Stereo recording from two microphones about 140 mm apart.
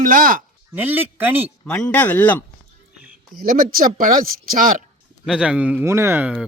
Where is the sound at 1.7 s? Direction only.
5° left (ahead or behind).